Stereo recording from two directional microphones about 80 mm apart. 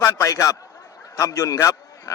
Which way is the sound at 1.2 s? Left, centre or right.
Left.